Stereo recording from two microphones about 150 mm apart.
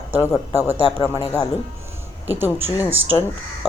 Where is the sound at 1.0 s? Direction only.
30° left (ahead or behind).